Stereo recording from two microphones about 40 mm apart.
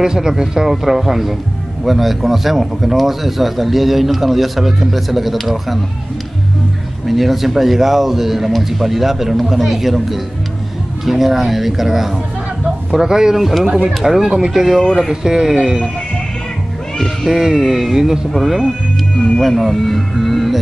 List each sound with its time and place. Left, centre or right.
0.0 s speech: centre
7.1 s speech: centre
13.4 s speech: centre
13.7 s speech: centre
17.3 s speech: centre
19.4 s speech: centre